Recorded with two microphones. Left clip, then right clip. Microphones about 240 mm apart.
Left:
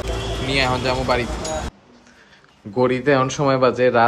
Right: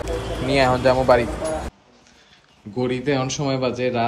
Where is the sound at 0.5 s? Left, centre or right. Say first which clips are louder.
Right 3 dB; centre.